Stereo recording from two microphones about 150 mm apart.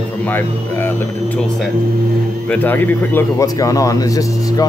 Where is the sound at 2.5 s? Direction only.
10° left (ahead or behind).